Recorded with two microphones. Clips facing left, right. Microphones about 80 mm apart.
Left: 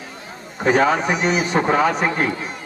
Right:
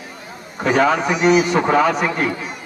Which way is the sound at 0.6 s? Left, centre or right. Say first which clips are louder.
Right 1 dB; left.